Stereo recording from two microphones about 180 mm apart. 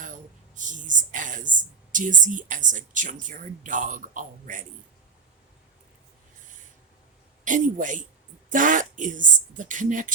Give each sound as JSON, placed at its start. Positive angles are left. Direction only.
{"t": 0.5, "sound": "a sound", "side_deg": -45}
{"t": 1.9, "sound": "speech", "side_deg": -45}
{"t": 7.4, "sound": "speech", "side_deg": -45}